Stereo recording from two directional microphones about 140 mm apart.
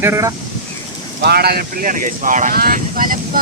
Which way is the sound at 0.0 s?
20° right (ahead or behind).